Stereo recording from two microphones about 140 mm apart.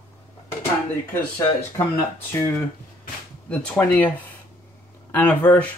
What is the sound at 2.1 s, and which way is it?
Speech, 15° left (ahead or behind).